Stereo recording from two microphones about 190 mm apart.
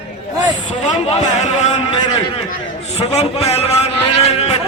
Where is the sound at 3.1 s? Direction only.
35° left (ahead or behind).